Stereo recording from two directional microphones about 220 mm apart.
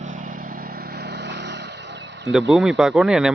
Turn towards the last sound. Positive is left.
turn(degrees=0)  # may be behind; listen again after turning